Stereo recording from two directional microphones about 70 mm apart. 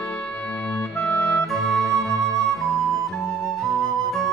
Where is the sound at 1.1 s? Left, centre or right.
Centre.